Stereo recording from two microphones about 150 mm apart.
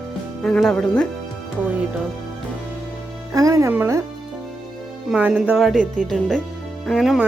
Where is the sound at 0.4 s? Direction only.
5° left (ahead or behind).